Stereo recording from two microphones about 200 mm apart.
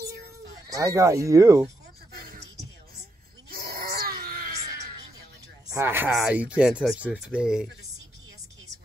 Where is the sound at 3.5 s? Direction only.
50° right (ahead or behind).